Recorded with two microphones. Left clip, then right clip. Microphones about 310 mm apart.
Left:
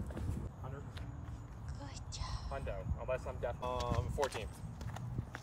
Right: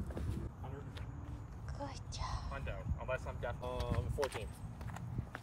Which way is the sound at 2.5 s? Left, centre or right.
Left.